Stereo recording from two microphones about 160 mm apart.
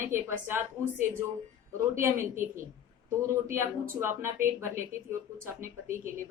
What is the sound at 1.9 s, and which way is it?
Speech, 20° right (ahead or behind).